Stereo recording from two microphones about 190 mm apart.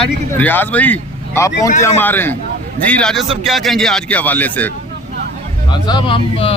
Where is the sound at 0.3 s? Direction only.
10° left (ahead or behind).